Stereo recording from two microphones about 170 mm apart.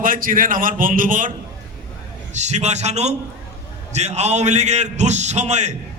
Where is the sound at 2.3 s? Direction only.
40° right (ahead or behind).